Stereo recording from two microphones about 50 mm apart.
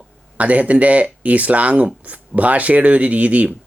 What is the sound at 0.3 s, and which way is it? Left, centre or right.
Speech, right.